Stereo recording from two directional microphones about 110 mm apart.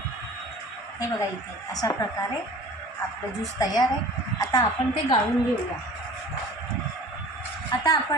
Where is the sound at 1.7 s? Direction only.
35° left (ahead or behind).